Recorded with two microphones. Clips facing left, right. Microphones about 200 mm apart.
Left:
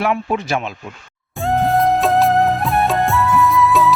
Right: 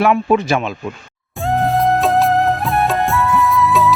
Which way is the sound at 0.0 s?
90° right.